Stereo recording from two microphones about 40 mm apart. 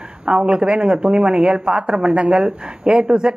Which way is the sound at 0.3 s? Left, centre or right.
Right.